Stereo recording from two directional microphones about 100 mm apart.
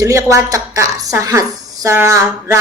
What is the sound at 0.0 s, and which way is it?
A woman's voice, 30° right (ahead or behind).